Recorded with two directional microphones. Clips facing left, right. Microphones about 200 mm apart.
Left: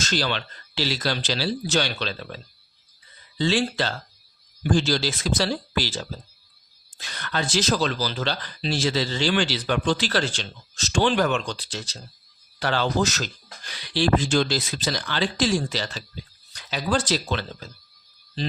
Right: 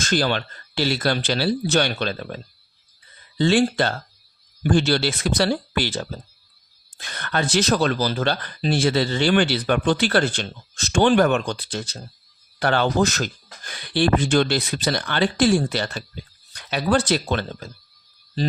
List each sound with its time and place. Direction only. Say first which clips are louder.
0.0 s speech: right 5 dB; 50° right (ahead or behind)